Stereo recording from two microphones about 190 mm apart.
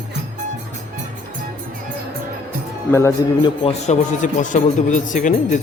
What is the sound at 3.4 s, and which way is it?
A man's voice, 35° left (ahead or behind).